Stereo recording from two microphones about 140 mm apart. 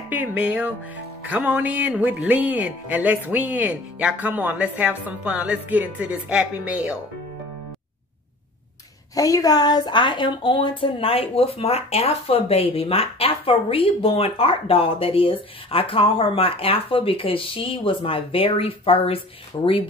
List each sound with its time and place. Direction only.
0.1 s speech: 10° right (ahead or behind)
9.1 s a woman's voice: 25° left (ahead or behind)